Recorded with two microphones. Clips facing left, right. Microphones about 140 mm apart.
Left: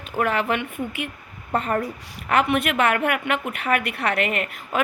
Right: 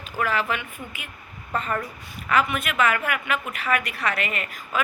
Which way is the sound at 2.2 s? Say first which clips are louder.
Left 3 dB; 65° left (ahead or behind).